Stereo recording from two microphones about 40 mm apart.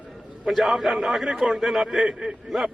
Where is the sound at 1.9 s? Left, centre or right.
Centre.